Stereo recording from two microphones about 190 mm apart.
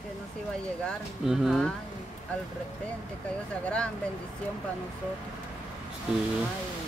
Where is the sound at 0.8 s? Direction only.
Centre (ahead or behind).